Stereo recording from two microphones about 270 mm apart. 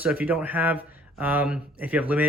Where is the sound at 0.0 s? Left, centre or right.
Centre.